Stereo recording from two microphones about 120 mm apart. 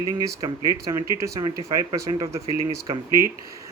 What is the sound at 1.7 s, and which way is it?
Speech, 25° right (ahead or behind).